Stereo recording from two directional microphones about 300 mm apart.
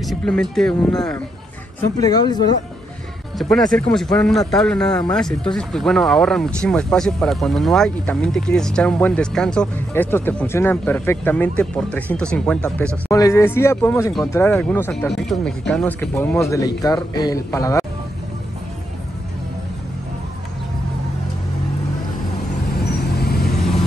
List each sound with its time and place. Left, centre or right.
0.0 s speech: centre
3.3 s speech: centre
22.9 s vehicle: left